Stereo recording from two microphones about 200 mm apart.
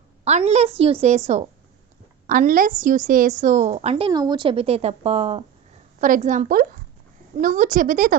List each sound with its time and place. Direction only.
0.3 s a woman's voice: 35° right (ahead or behind)
6.0 s a woman's voice: 40° right (ahead or behind)